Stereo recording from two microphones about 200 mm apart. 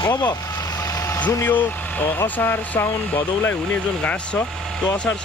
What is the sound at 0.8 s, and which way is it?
Speech, 15° left (ahead or behind).